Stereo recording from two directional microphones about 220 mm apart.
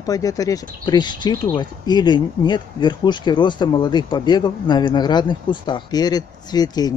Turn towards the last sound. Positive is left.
turn(degrees=20)  # may be behind; listen again after turning